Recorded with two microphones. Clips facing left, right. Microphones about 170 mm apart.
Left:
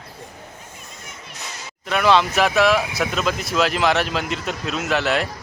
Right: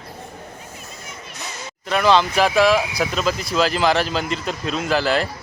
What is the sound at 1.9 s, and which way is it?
A man's voice, centre (ahead or behind).